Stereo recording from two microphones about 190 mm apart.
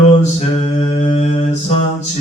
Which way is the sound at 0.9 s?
35° left (ahead or behind).